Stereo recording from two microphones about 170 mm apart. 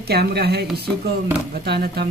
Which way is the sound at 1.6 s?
75° right (ahead or behind).